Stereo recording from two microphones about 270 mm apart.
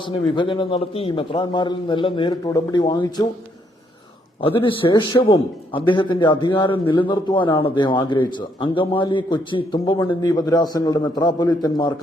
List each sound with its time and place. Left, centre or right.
0.0 s a man's voice: centre
4.4 s a man's voice: centre